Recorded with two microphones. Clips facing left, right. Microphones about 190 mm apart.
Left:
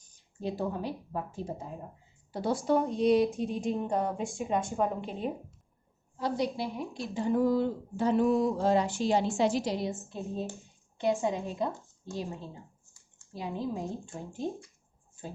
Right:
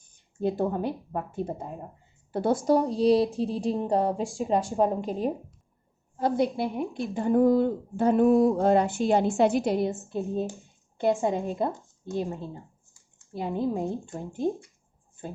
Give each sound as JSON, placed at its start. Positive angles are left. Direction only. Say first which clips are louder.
{"t": 0.0, "sound": "a woman's voice", "louder": "right 8 dB", "side_deg": -55}
{"t": 2.6, "sound": "a woman's voice", "louder": "right 3 dB", "side_deg": -35}
{"t": 6.1, "sound": "a woman's voice", "louder": "right 6 dB", "side_deg": -50}
{"t": 10.2, "sound": "speech", "louder": "right 7 dB", "side_deg": 0}
{"t": 10.9, "sound": "a woman's voice", "louder": "right 4 dB", "side_deg": -55}
{"t": 12.3, "sound": "a woman's voice", "louder": "right 6 dB", "side_deg": -55}